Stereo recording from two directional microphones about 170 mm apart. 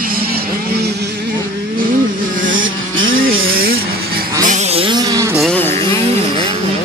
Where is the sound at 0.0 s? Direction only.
60° right (ahead or behind).